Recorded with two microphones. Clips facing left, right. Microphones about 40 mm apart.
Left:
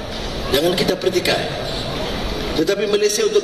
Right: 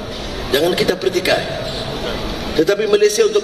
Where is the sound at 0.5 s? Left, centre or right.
Right.